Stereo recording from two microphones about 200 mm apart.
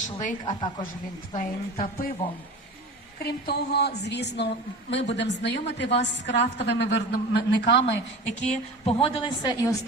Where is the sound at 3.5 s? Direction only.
55° left (ahead or behind).